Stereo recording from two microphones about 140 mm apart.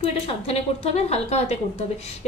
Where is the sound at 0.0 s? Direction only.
45° left (ahead or behind).